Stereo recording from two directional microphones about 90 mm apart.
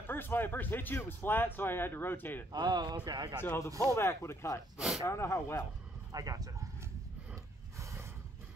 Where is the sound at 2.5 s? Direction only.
50° right (ahead or behind).